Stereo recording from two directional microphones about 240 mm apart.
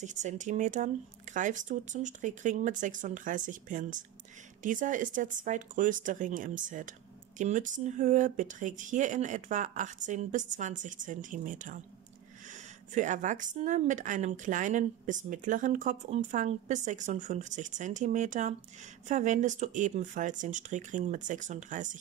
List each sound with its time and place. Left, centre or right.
0.0 s speech: right